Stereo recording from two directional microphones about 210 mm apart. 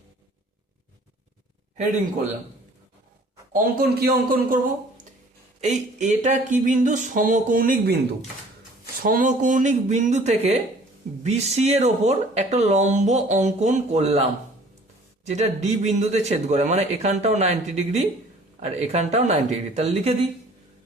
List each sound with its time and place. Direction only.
3.5 s speech: 40° right (ahead or behind)
9.0 s speech: 40° right (ahead or behind)